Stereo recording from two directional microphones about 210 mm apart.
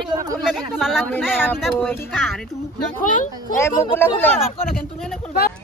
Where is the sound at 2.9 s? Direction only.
40° left (ahead or behind).